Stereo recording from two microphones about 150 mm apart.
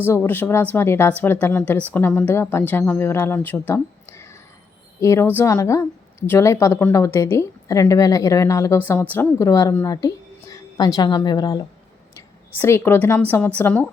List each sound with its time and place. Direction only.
0.0 s a woman's voice: 15° left (ahead or behind)
12.5 s speech: 15° left (ahead or behind)